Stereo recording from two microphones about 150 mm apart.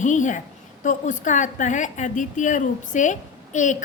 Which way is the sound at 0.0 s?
55° left (ahead or behind).